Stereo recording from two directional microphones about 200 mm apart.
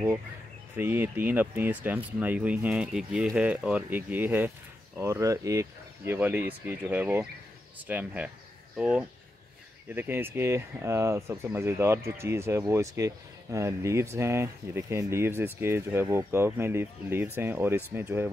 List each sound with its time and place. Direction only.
0.7 s speech: 10° right (ahead or behind)